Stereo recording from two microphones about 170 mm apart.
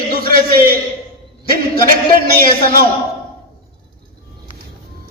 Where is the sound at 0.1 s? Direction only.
60° right (ahead or behind).